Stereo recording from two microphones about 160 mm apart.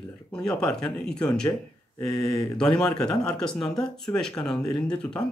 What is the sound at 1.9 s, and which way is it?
Speech, 25° left (ahead or behind).